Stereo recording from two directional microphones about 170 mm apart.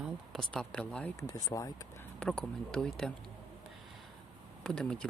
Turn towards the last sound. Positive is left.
turn(degrees=5)  # may be behind; listen again after turning